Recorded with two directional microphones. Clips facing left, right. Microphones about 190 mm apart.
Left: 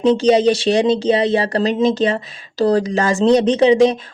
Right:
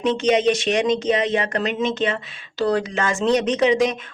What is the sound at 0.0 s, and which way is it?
Speech, 35° left (ahead or behind).